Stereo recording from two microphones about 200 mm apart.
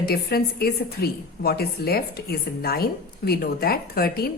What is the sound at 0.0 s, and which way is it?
A woman's voice, 50° left (ahead or behind).